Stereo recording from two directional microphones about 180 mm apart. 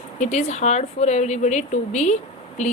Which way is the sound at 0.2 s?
40° left (ahead or behind).